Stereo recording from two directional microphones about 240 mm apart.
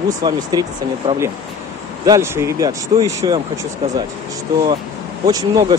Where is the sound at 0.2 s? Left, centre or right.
Centre.